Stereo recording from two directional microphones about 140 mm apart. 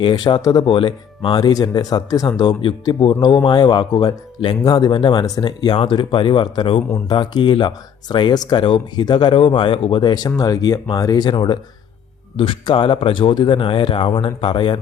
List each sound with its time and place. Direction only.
0.0 s speech: 35° left (ahead or behind)